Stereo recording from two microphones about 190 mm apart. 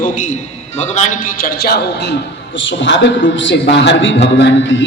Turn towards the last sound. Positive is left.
turn(degrees=70)  # may be behind; listen again after turning